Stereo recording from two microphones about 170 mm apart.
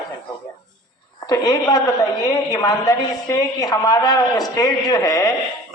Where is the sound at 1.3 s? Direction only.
20° left (ahead or behind).